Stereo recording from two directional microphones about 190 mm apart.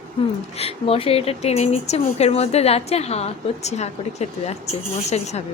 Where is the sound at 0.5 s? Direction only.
30° left (ahead or behind).